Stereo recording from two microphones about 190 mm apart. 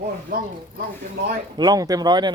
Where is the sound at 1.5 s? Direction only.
20° right (ahead or behind).